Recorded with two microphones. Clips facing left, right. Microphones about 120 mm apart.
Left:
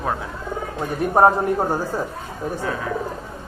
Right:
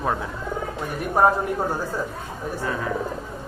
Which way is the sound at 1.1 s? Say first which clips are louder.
Left 3 dB; 25° left (ahead or behind).